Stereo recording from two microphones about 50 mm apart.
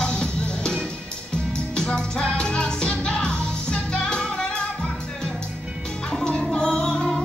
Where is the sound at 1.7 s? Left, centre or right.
Centre.